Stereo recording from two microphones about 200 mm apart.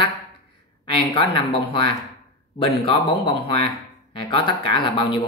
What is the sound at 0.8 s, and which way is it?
Speech, 30° left (ahead or behind).